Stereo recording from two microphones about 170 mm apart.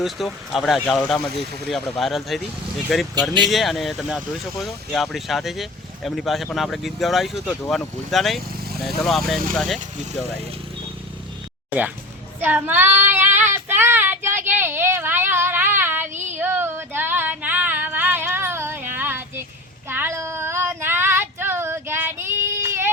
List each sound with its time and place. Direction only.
0.0 s speech: centre (ahead or behind)
12.4 s child singing: 10° right (ahead or behind)
16.1 s child singing: 45° right (ahead or behind)
16.4 s a sound: 10° right (ahead or behind)
19.9 s child singing: 15° right (ahead or behind)